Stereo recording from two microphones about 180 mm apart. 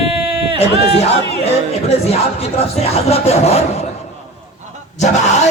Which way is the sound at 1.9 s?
35° left (ahead or behind).